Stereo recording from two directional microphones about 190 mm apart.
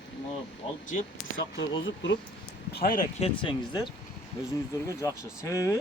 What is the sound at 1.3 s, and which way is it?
Speech, 80° left.